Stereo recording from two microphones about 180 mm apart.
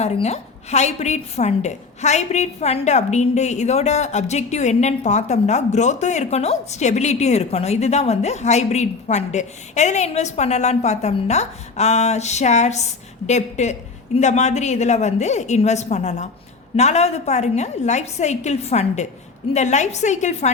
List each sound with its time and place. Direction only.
0.0 s a woman's voice: 35° left (ahead or behind)